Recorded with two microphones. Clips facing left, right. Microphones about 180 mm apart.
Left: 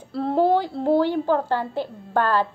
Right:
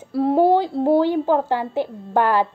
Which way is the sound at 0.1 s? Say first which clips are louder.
Right 4 dB; 15° right (ahead or behind).